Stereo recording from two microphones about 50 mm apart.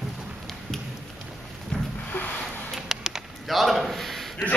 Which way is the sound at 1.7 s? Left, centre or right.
Left.